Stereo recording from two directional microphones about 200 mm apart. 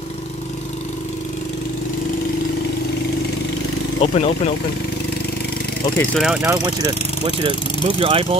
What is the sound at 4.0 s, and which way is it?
Speech, 30° left (ahead or behind).